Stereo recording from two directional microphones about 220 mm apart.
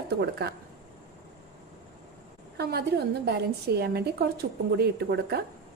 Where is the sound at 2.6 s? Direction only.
45° right (ahead or behind).